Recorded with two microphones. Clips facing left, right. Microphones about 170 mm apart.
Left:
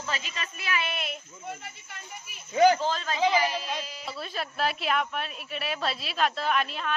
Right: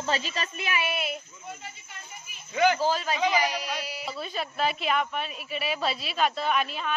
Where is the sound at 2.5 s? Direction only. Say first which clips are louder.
Left 3 dB; 35° left (ahead or behind).